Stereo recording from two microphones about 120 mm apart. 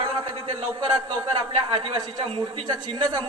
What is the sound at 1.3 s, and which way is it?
A man's voice, 50° right (ahead or behind).